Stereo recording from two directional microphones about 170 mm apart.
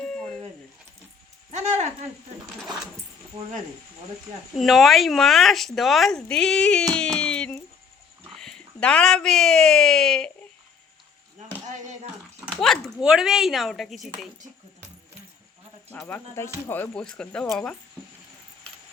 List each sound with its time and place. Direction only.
1.5 s a sound: 40° right (ahead or behind)
3.3 s speech: 30° right (ahead or behind)
4.5 s speech: centre (ahead or behind)
6.9 s a sound: 5° left (ahead or behind)
8.3 s speech: 5° left (ahead or behind)
12.5 s speech: centre (ahead or behind)
15.9 s speech: 10° left (ahead or behind)